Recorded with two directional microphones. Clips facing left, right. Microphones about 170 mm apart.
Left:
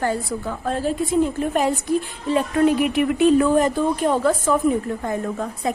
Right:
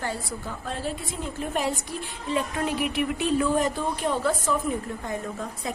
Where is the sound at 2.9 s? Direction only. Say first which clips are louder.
Left 9 dB; 55° left (ahead or behind).